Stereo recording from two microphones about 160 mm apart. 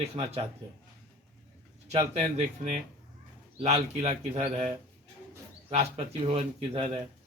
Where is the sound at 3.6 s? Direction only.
40° right (ahead or behind).